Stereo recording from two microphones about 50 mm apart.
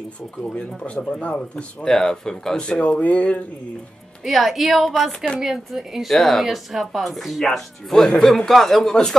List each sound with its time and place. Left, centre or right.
0.6 s speech: left
1.9 s speech: centre
2.6 s speech: left
4.2 s speech: centre
6.0 s speech: centre